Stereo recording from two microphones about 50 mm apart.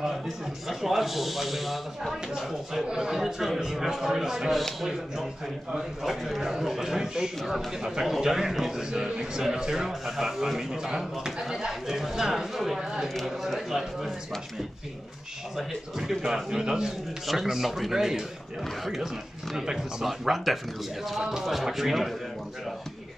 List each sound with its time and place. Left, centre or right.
0.7 s speech: centre
15.5 s speech: centre
19.5 s speech: centre